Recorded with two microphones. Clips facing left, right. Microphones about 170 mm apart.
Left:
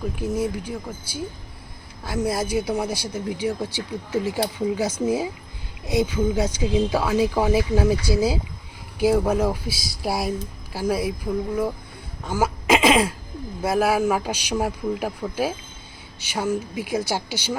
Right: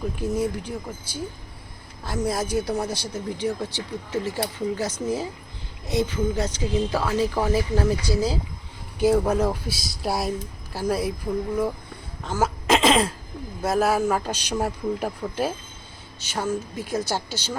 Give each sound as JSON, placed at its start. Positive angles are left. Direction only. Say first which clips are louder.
{"t": 0.2, "sound": "speech", "louder": "even", "side_deg": 5}
{"t": 12.2, "sound": "speech", "louder": "left 1 dB", "side_deg": 10}